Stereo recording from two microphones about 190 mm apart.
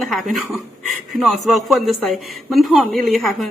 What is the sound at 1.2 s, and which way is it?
A man's voice, centre (ahead or behind).